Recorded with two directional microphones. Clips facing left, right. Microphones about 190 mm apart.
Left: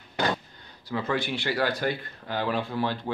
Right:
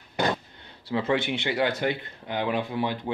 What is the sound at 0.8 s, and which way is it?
Speech, 25° right (ahead or behind).